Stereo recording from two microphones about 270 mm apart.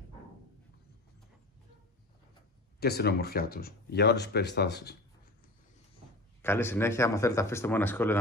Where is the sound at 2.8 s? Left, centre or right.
Left.